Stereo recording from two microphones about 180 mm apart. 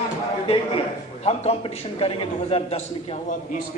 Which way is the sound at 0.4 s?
30° left (ahead or behind).